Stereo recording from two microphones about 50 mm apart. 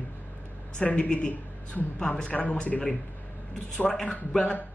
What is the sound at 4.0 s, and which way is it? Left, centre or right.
Speech, centre.